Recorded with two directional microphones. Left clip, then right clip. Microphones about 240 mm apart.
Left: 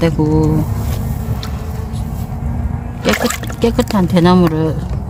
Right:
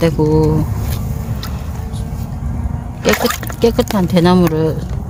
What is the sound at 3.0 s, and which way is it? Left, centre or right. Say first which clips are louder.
Speech: right 1 dB; centre.